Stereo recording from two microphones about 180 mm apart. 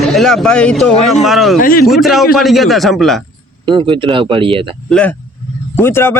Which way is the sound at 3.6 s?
25° right (ahead or behind).